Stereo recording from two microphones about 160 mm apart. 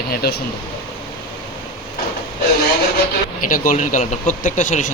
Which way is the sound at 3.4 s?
60° left (ahead or behind).